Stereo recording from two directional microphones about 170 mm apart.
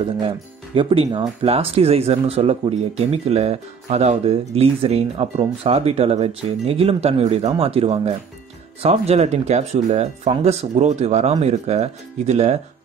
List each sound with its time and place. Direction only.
0.7 s speech: 30° right (ahead or behind)